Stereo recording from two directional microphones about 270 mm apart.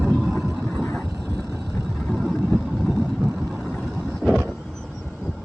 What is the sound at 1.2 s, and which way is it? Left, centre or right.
Vehicle, right.